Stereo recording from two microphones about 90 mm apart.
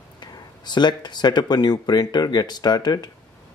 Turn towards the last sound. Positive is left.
turn(degrees=50)  # may be behind; listen again after turning